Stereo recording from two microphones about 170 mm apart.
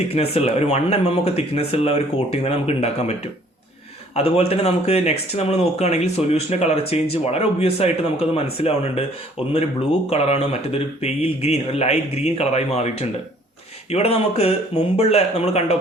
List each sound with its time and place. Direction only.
0.1 s speech: 35° left (ahead or behind)